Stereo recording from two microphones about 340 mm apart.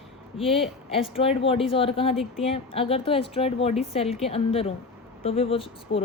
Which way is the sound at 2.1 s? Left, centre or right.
Centre.